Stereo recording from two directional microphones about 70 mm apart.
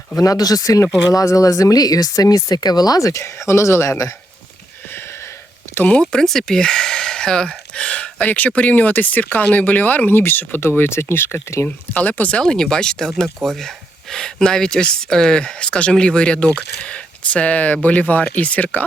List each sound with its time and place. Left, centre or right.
0.2 s speech: left
5.9 s speech: centre; by 11.3 s left
11.6 s speech: left
12.4 s speech: centre
13.2 s speech: right
13.6 s speech: centre; by 18.9 s left